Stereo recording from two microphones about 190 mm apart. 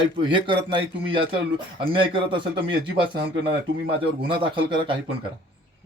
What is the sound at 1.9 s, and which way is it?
Speech, 25° right (ahead or behind).